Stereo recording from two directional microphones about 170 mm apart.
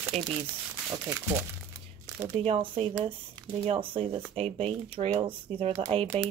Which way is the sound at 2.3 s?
35° right (ahead or behind).